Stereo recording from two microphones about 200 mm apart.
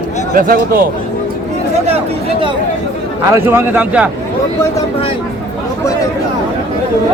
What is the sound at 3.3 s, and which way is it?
Speech, 10° right (ahead or behind).